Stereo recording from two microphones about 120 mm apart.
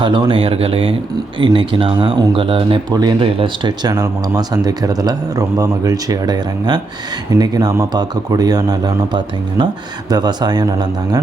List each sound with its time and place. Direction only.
0.0 s speech: 40° right (ahead or behind)
2.9 s a man's voice: 35° right (ahead or behind)
3.9 s a man's voice: 30° right (ahead or behind)